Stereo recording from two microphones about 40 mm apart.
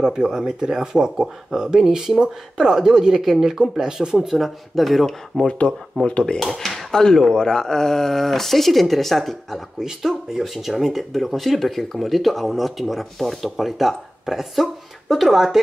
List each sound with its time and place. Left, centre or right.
0.1 s speech: centre
4.4 s speech: centre
6.0 s speech: left
6.4 s speech: centre
6.9 s speech: centre
9.8 s speech: centre